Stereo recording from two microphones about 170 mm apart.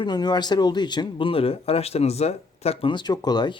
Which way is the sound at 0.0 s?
25° left (ahead or behind).